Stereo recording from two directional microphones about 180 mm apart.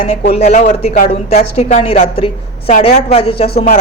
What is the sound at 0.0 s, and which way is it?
A man's voice, 35° left (ahead or behind).